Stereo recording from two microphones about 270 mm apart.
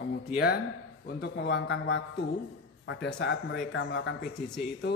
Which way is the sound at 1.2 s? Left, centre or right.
Left.